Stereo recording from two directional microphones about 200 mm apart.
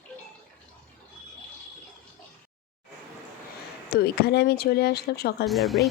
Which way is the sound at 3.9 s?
50° left (ahead or behind).